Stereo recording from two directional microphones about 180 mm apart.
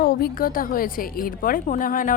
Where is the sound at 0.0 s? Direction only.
60° left (ahead or behind).